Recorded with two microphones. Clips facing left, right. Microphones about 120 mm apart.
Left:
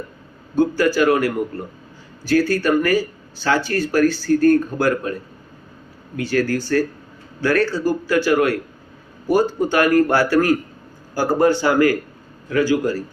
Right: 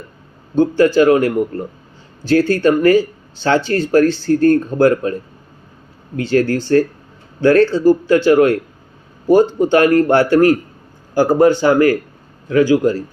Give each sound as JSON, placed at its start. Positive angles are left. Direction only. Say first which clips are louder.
{"t": 0.8, "sound": "speech", "louder": "right 7 dB", "side_deg": -25}
{"t": 6.1, "sound": "a man's voice", "louder": "right 5 dB", "side_deg": -25}